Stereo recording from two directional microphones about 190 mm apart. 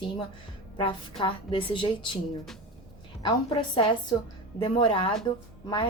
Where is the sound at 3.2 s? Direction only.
25° left (ahead or behind).